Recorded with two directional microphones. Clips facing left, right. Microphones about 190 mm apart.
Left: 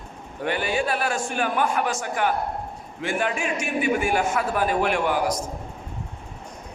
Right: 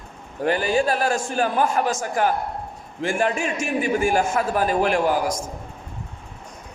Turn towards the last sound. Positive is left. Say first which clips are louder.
# right 3 dB
turn(degrees=-40)  # may be behind; listen again after turning